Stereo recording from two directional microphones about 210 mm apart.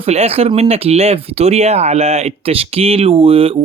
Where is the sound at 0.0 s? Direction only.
30° right (ahead or behind).